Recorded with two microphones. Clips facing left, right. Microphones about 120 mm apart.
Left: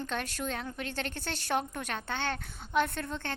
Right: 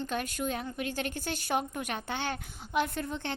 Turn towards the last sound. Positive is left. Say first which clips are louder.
# right 2 dB
turn(degrees=-15)  # may be behind; listen again after turning